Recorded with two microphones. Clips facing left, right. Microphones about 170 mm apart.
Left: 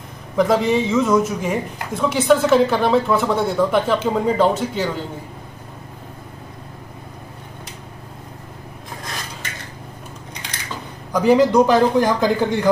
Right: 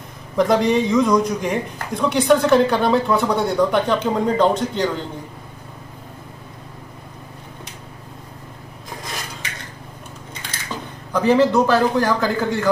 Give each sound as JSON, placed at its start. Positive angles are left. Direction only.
{"t": 0.4, "sound": "speech", "side_deg": 0}
{"t": 11.1, "sound": "a man's voice", "side_deg": 10}